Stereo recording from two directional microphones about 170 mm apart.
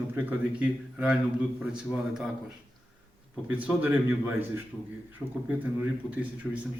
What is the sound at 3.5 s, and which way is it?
Speech, 10° right (ahead or behind).